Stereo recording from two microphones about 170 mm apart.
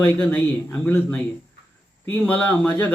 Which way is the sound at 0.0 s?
10° left (ahead or behind).